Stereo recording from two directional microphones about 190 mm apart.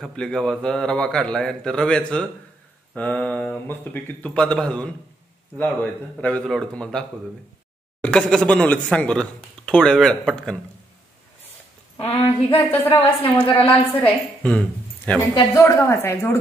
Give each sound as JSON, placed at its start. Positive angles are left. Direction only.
{"t": 0.0, "sound": "speech", "side_deg": 5}
{"t": 12.0, "sound": "a woman's voice", "side_deg": 30}
{"t": 12.5, "sound": "a woman's voice", "side_deg": 10}